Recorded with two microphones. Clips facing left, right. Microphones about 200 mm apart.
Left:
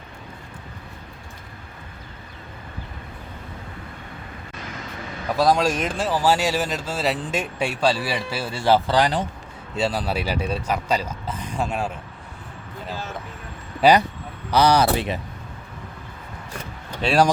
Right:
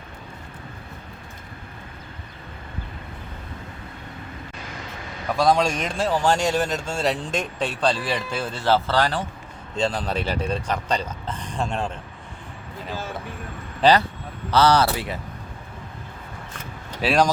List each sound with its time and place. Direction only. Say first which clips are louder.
5.4 s speech: left 1 dB; centre (ahead or behind)
13.8 s speech: left 1 dB; 10° left (ahead or behind)
17.0 s speech: even; 5° right (ahead or behind)